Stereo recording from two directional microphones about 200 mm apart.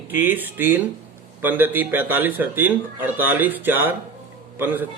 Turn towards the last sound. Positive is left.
turn(degrees=-10)  # may be behind; listen again after turning